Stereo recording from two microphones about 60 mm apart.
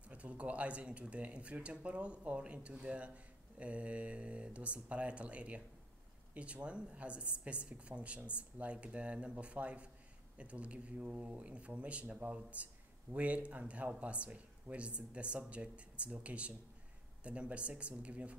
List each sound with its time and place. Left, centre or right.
0.1 s speech: right